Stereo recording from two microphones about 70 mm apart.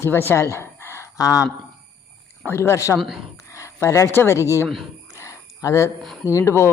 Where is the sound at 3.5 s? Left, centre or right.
Left.